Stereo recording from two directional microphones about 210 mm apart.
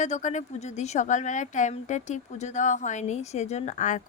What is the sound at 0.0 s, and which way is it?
A woman's voice, 35° left (ahead or behind).